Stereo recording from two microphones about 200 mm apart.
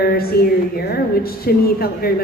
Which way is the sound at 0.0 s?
50° left (ahead or behind).